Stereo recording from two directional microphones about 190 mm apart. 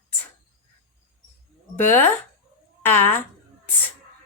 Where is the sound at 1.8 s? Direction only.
10° left (ahead or behind).